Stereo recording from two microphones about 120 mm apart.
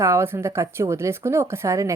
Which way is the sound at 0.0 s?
25° right (ahead or behind).